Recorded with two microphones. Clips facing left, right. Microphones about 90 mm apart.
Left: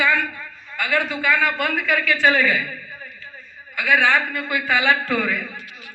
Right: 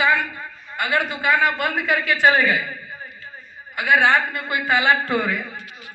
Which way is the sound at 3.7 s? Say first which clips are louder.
Right 1 dB; 45° right (ahead or behind).